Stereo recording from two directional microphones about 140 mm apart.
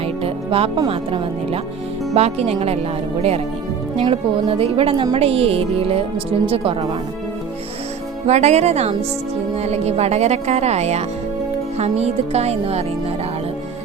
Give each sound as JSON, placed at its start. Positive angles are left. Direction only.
{"t": 0.2, "sound": "music", "side_deg": -40}
{"t": 0.9, "sound": "speech", "side_deg": -45}
{"t": 8.3, "sound": "speech", "side_deg": -55}